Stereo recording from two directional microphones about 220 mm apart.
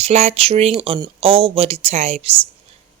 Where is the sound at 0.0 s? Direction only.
30° right (ahead or behind).